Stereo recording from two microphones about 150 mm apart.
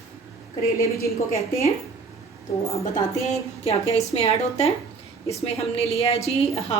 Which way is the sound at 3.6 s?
45° left (ahead or behind).